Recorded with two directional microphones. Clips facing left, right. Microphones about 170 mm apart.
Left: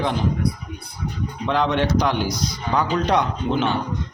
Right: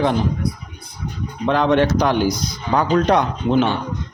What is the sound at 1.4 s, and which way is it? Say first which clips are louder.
A man's voice: right 5 dB; 50° right (ahead or behind).